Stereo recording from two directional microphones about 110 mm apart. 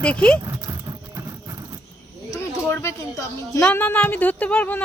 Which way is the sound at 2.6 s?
20° left (ahead or behind).